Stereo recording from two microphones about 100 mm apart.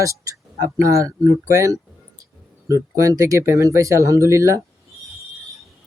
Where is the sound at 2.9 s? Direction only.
30° right (ahead or behind).